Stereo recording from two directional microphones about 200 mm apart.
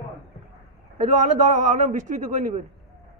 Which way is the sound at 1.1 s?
40° right (ahead or behind).